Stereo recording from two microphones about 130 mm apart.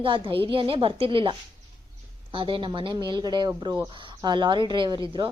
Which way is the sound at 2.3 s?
40° right (ahead or behind).